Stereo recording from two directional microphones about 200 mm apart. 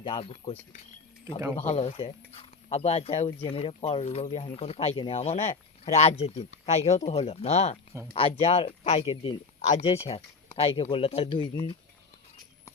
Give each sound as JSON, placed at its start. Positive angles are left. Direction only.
{"t": 0.0, "sound": "speech", "side_deg": 25}
{"t": 1.5, "sound": "speech", "side_deg": 30}